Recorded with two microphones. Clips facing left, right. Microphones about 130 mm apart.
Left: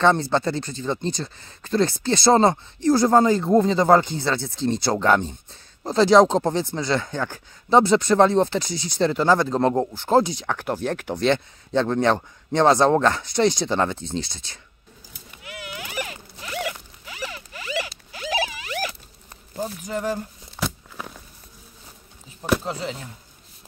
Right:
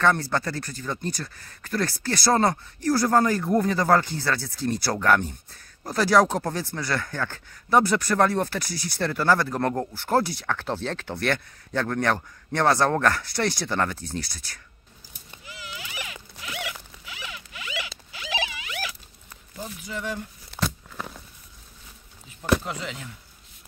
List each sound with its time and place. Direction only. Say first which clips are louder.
0.0 s speech: left 4 dB; 25° left (ahead or behind)
15.4 s zipper: left 5 dB; 60° left (ahead or behind); by 18.9 s 40° left (ahead or behind)
19.5 s speech: left 7 dB; 40° left (ahead or behind)
20.5 s a sound: even; 5° left (ahead or behind)
22.7 s speech: left 4 dB; 30° left (ahead or behind)